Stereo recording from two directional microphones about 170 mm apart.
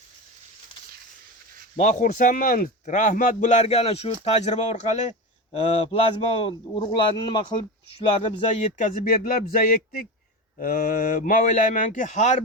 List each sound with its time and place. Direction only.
1.7 s a man's voice: 45° left (ahead or behind)